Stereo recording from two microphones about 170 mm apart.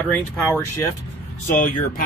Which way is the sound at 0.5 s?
15° left (ahead or behind).